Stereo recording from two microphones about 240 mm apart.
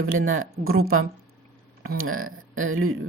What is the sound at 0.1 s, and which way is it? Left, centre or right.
Speech, right.